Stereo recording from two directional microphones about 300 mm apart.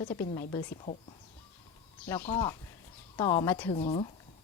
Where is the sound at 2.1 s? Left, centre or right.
Centre.